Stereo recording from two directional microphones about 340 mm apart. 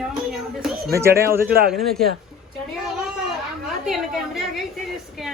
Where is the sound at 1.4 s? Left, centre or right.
Right.